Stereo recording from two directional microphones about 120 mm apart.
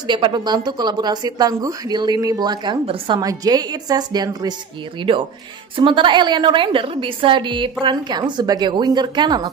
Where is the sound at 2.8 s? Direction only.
50° right (ahead or behind).